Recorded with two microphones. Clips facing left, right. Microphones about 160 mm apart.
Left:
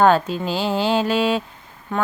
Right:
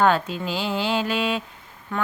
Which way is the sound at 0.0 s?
35° left (ahead or behind).